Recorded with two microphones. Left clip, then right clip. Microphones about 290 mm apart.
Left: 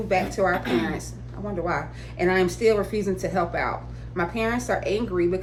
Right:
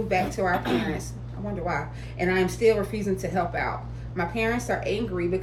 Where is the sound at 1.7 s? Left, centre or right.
Centre.